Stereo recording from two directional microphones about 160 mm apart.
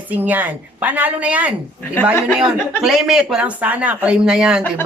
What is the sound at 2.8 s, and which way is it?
Speech, 5° right (ahead or behind).